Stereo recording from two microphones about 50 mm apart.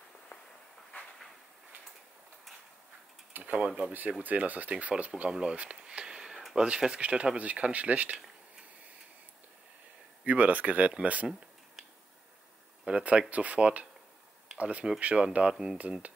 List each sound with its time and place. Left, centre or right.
0.9 s train: left
3.5 s speech: right
10.2 s speech: right
12.8 s speech: right
15.5 s speech: centre